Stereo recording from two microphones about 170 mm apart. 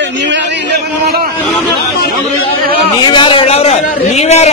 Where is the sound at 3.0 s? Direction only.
30° left (ahead or behind).